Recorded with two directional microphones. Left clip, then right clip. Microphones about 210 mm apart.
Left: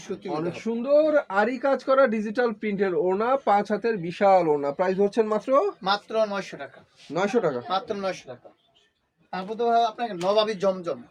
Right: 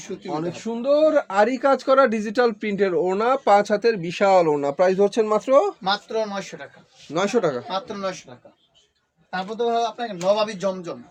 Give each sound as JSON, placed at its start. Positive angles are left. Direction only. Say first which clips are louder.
{"t": 0.3, "sound": "speech", "louder": "right 1 dB", "side_deg": -35}
{"t": 5.8, "sound": "speech", "louder": "even", "side_deg": 0}
{"t": 7.1, "sound": "a man's voice", "louder": "right 3 dB", "side_deg": -40}
{"t": 7.7, "sound": "speech", "louder": "even", "side_deg": 0}
{"t": 9.3, "sound": "speech", "louder": "even", "side_deg": -5}